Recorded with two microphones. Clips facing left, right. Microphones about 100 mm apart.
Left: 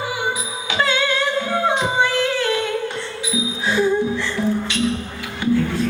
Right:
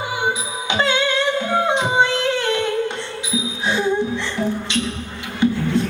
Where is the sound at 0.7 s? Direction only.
20° right (ahead or behind).